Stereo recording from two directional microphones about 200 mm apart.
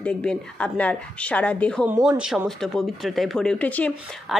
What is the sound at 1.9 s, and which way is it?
A woman's voice, 5° right (ahead or behind).